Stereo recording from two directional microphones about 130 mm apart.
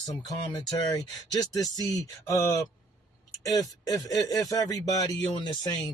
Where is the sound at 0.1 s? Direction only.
30° left (ahead or behind).